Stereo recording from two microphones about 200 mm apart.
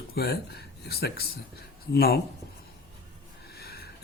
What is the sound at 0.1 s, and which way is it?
Speech, 55° left (ahead or behind).